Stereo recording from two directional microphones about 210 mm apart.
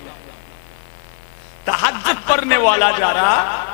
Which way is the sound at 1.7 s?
15° left (ahead or behind).